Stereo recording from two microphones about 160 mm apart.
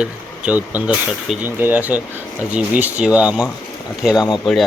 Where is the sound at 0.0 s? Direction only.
10° right (ahead or behind).